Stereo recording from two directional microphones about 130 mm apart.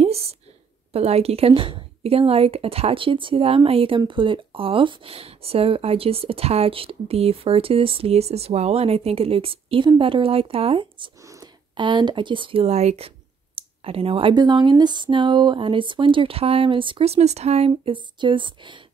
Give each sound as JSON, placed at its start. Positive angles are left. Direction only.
{"t": 0.0, "sound": "a sound", "side_deg": -50}
{"t": 0.9, "sound": "speech", "side_deg": -50}
{"t": 13.6, "sound": "clicking", "side_deg": -45}
{"t": 14.3, "sound": "speech", "side_deg": -35}